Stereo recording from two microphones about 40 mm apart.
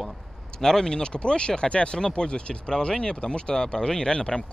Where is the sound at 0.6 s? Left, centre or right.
Centre.